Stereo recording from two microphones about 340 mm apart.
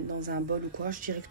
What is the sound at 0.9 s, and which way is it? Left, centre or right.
Speech, right.